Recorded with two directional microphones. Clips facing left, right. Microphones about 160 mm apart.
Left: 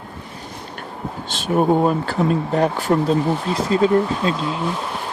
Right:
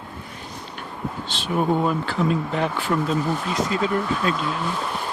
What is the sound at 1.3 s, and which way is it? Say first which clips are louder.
Speech: left 5 dB; 45° left (ahead or behind).